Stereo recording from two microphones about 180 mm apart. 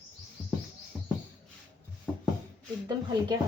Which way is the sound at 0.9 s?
5° right (ahead or behind).